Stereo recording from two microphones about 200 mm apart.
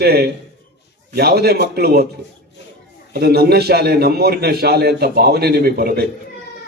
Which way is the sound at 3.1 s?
55° right (ahead or behind).